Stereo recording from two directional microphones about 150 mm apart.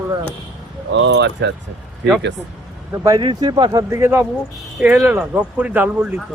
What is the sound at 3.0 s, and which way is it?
Speech, 25° right (ahead or behind).